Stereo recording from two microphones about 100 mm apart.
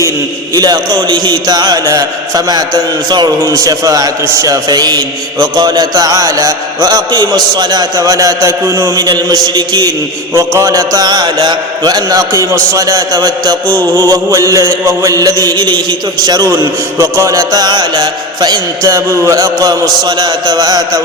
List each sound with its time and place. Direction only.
0.5 s a man's voice: 40° right (ahead or behind)
10.3 s a man's voice: 30° right (ahead or behind)